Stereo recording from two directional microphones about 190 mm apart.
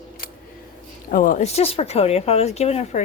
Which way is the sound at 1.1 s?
45° left (ahead or behind).